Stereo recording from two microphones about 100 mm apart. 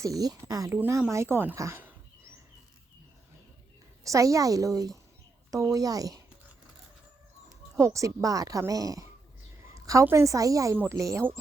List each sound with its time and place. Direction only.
0.0 s speech: 35° right (ahead or behind)
4.0 s speech: 35° right (ahead or behind)
7.8 s a woman's voice: 30° right (ahead or behind)